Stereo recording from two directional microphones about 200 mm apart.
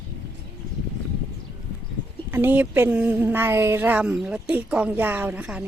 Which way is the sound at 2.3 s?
10° right (ahead or behind).